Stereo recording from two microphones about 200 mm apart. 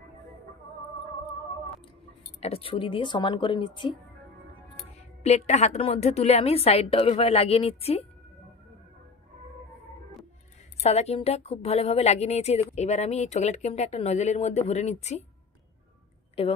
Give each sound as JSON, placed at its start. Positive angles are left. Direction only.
{"t": 2.4, "sound": "speech", "side_deg": 30}
{"t": 5.2, "sound": "speech", "side_deg": 35}
{"t": 10.8, "sound": "speech", "side_deg": 30}
{"t": 16.4, "sound": "speech", "side_deg": 30}